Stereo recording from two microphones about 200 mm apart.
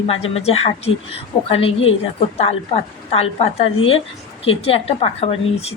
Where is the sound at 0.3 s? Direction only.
30° left (ahead or behind).